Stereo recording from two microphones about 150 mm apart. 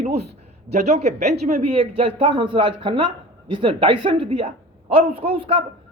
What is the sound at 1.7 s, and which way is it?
A man's voice, 40° right (ahead or behind).